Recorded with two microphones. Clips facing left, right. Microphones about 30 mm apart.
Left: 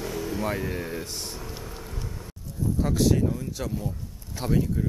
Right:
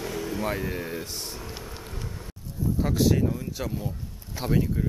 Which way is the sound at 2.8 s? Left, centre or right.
Centre.